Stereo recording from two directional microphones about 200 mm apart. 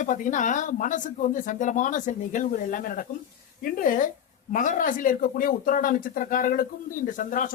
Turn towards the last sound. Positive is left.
turn(degrees=40)  # may be behind; listen again after turning